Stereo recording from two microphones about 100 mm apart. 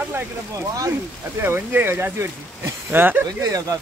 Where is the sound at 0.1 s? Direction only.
30° right (ahead or behind).